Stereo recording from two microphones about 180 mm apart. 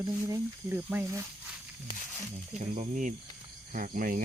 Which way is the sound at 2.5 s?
40° right (ahead or behind).